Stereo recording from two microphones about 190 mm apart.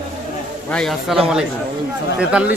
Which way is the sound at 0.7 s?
Centre (ahead or behind).